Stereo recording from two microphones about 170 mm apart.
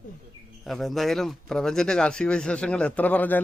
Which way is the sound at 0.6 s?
Centre (ahead or behind).